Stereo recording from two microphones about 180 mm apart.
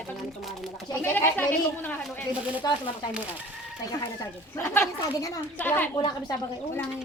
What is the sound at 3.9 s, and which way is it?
Speech, 20° left (ahead or behind).